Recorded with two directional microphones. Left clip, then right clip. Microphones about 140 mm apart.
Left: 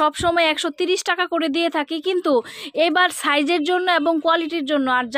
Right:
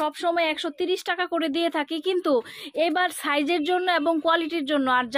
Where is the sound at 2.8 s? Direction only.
45° left (ahead or behind); by 5.0 s 20° left (ahead or behind).